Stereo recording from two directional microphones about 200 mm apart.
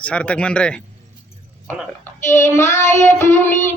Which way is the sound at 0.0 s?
5° left (ahead or behind).